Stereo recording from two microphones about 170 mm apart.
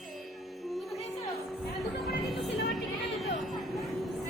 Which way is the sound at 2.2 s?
Centre (ahead or behind).